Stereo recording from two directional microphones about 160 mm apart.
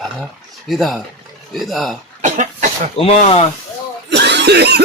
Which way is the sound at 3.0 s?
35° left (ahead or behind).